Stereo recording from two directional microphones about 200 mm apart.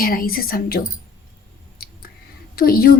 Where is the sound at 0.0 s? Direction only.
45° left (ahead or behind).